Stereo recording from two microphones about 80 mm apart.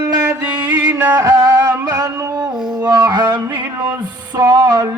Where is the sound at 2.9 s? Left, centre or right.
Right.